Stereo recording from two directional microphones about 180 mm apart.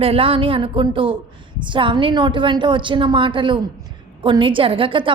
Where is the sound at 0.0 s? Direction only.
30° right (ahead or behind).